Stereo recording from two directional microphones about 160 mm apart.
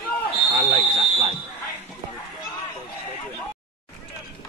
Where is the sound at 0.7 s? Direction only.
40° right (ahead or behind).